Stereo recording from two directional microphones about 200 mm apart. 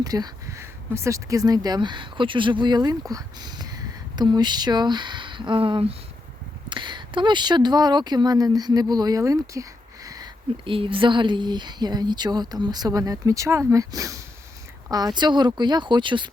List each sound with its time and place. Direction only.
0.0 s speech: 20° right (ahead or behind)